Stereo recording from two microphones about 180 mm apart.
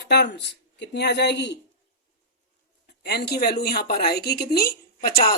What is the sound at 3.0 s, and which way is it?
Speech, 65° left (ahead or behind).